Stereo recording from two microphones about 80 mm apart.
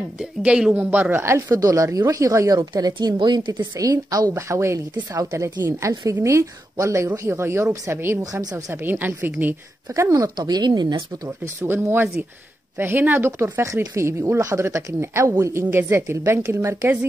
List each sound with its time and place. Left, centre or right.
0.2 s speech: centre
1.1 s speech: right
1.5 s speech: right
2.9 s a woman's voice: right
3.8 s speech: right
4.3 s speech: right
8.2 s speech: right
8.8 s a woman's voice: right
9.9 s speech: right
10.3 s speech: right
11.2 s speech: right